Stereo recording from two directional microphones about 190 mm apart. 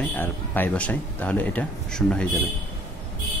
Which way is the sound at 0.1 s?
10° left (ahead or behind).